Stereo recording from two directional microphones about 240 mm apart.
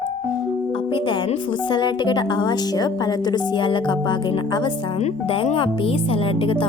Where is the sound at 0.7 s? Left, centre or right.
Left.